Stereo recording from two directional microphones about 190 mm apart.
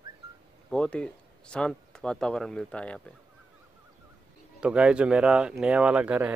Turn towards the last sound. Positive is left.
turn(degrees=-5)  # may be behind; listen again after turning